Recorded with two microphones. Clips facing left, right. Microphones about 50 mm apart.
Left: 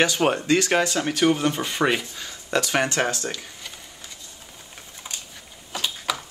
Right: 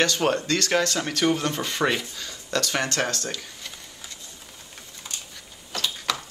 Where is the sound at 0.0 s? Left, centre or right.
Centre.